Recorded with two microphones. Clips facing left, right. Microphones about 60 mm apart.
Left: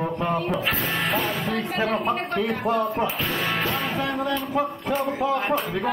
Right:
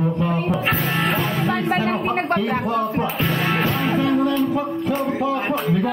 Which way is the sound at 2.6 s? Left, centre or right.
Centre.